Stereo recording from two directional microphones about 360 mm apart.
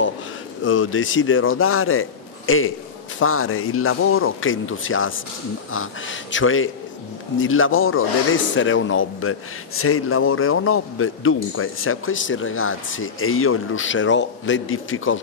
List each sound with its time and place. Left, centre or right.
0.7 s a man's voice: left